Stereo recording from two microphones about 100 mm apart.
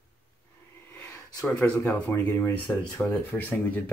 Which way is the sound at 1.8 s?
20° left (ahead or behind).